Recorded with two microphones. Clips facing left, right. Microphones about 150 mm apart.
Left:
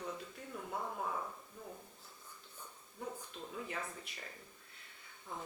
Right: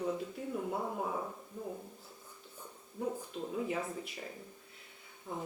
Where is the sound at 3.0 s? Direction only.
20° right (ahead or behind).